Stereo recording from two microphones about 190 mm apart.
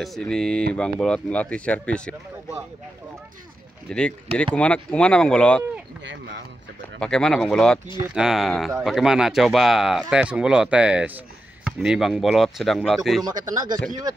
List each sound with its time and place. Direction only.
0.0 s speech: centre (ahead or behind)
3.9 s speech: 5° left (ahead or behind)
7.0 s speech: 5° left (ahead or behind)
13.2 s speech: 20° right (ahead or behind)